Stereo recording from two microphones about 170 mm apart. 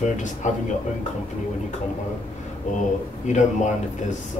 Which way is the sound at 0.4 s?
45° left (ahead or behind).